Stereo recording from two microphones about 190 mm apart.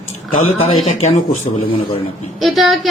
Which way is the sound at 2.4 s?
Centre (ahead or behind).